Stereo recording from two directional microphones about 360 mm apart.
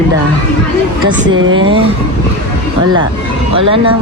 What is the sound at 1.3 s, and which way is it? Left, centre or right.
Speech, right.